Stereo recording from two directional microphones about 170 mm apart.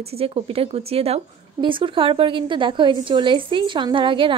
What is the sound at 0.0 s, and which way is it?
Speech, 35° right (ahead or behind).